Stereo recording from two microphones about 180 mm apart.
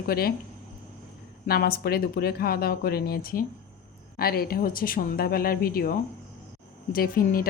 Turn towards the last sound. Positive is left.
turn(degrees=55)  # may be behind; listen again after turning